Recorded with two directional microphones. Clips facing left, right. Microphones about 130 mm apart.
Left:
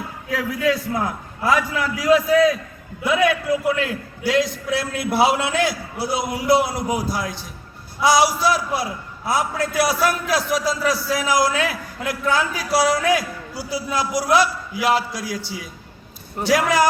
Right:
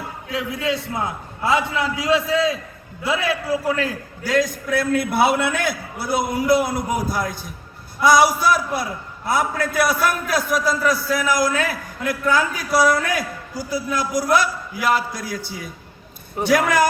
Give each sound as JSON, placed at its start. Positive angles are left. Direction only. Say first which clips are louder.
{"t": 0.3, "sound": "a man's voice", "louder": "left 3 dB", "side_deg": -25}